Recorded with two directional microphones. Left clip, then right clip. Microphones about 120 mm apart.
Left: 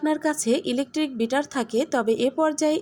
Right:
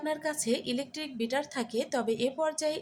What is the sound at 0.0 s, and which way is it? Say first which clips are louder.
A woman's voice: left 8 dB; 45° left (ahead or behind).